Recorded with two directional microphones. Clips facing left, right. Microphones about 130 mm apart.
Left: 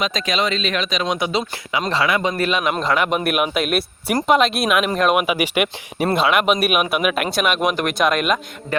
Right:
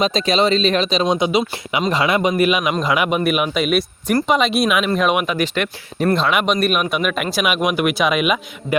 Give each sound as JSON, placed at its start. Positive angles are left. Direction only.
{"t": 0.0, "sound": "speech", "side_deg": -30}
{"t": 1.3, "sound": "a man's voice", "side_deg": -15}
{"t": 3.2, "sound": "speech", "side_deg": 0}
{"t": 5.2, "sound": "speech", "side_deg": 10}